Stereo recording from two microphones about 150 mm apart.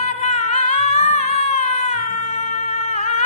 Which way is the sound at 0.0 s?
45° left (ahead or behind).